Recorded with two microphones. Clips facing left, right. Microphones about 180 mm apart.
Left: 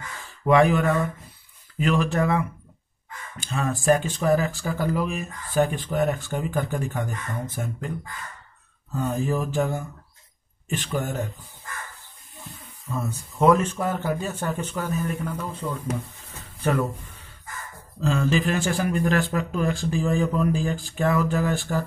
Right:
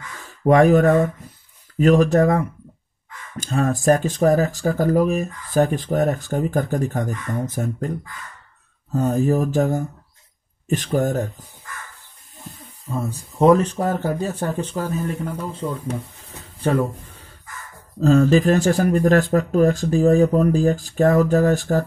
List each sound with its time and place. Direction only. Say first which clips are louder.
0.2 s speech: right 4 dB; 40° right (ahead or behind)
8.9 s speech: right 7 dB; 40° right (ahead or behind)
12.4 s speech: right 3 dB; 35° right (ahead or behind)
16.5 s speech: right 4 dB; 35° right (ahead or behind)